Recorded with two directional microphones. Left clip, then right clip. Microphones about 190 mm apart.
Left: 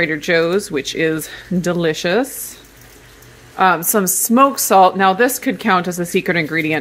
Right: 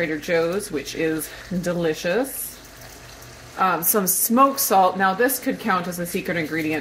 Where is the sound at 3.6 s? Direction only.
65° left (ahead or behind).